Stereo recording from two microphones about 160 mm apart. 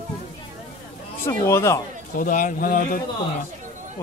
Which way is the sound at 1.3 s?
15° left (ahead or behind).